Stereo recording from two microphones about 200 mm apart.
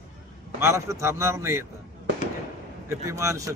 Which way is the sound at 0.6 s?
15° right (ahead or behind).